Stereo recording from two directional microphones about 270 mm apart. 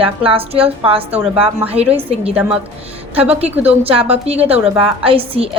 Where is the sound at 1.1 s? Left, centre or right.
Centre.